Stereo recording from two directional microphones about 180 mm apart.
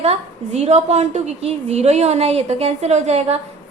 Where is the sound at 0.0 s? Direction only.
35° right (ahead or behind).